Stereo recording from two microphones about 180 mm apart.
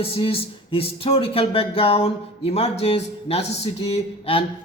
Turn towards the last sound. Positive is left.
turn(degrees=35)  # may be behind; listen again after turning